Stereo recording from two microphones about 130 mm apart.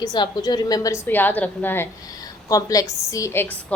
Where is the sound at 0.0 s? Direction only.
30° left (ahead or behind).